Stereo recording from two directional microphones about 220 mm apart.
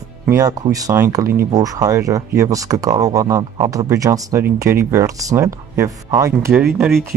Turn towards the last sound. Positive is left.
turn(degrees=0)  # may be behind; listen again after turning